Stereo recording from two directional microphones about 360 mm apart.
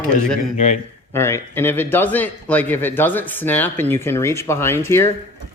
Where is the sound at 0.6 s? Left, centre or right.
Centre.